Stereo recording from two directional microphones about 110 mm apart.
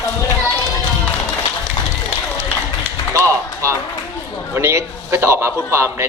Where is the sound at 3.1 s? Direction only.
30° right (ahead or behind).